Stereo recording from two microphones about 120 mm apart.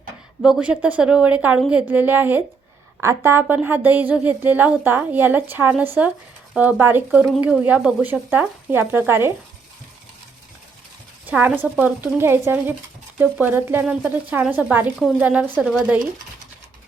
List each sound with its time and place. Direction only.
0.4 s a woman's voice: 5° right (ahead or behind)
11.3 s a woman's voice: 15° right (ahead or behind)